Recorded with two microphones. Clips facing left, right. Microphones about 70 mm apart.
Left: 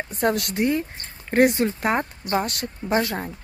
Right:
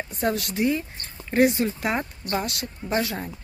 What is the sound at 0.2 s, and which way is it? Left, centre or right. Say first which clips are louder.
Speech: left 2 dB; left.